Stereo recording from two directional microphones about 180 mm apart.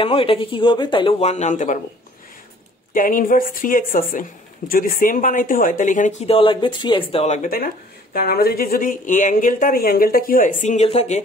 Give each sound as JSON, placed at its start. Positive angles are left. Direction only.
{"t": 0.0, "sound": "speech", "side_deg": 30}
{"t": 2.9, "sound": "a woman's voice", "side_deg": 50}
{"t": 7.5, "sound": "a woman's voice", "side_deg": 55}